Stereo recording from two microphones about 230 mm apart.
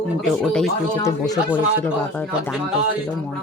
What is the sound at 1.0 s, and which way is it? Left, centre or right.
Speech, centre.